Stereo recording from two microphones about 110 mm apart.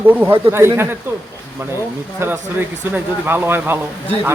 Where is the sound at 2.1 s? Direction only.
20° right (ahead or behind).